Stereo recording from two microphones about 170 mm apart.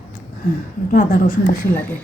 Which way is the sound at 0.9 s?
60° left (ahead or behind).